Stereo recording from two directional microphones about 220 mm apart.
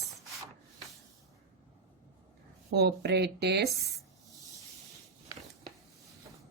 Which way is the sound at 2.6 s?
50° right (ahead or behind).